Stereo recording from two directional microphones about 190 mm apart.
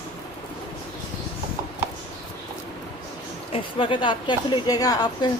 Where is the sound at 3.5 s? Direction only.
25° left (ahead or behind).